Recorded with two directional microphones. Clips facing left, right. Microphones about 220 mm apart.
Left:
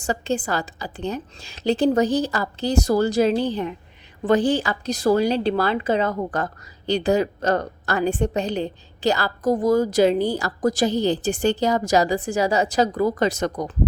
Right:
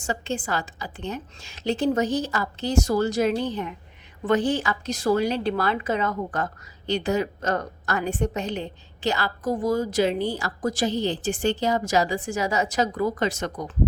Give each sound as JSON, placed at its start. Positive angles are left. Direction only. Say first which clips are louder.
{"t": 0.0, "sound": "a woman's voice", "louder": "left 5 dB", "side_deg": 35}